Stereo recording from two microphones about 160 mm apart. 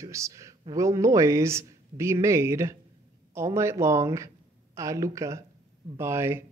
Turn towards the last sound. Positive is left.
turn(degrees=-15)  # may be behind; listen again after turning